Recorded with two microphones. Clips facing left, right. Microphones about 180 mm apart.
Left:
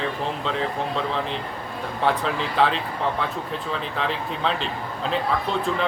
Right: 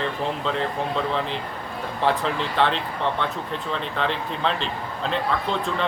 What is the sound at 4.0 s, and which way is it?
Speech, centre (ahead or behind).